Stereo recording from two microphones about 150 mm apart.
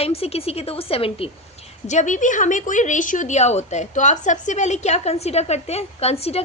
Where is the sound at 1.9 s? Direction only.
55° left (ahead or behind).